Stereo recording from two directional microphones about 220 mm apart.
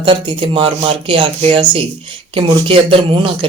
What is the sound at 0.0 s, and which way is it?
Speech, 20° right (ahead or behind).